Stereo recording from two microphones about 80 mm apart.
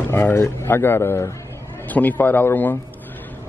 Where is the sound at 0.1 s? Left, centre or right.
Left.